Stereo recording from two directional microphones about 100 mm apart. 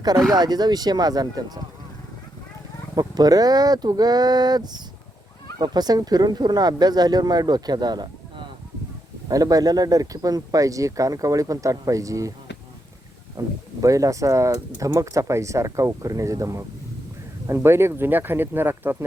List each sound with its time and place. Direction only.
0.0 s speech: 40° right (ahead or behind)
2.9 s speech: 40° right (ahead or behind)
13.4 s speech: 30° right (ahead or behind)